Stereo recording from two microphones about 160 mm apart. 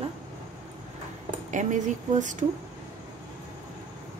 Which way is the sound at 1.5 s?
50° right (ahead or behind).